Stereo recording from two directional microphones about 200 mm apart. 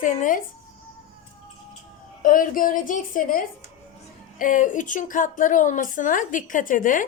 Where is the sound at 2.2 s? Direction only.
45° left (ahead or behind).